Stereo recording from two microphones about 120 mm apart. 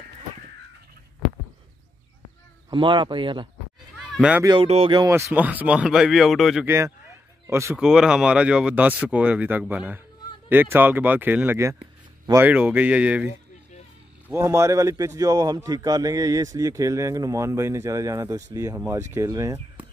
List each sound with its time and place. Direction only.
2.7 s speech: 45° right (ahead or behind)
4.6 s speech: 55° right (ahead or behind)
5.3 s speech: 15° right (ahead or behind)
6.6 s speech: 20° right (ahead or behind)
7.7 s speech: 5° right (ahead or behind)
14.3 s speech: 25° right (ahead or behind)